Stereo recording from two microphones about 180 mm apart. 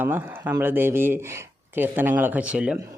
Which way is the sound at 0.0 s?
10° right (ahead or behind).